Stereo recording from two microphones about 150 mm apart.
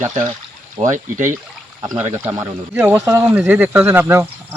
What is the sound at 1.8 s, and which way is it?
Speech, 25° right (ahead or behind).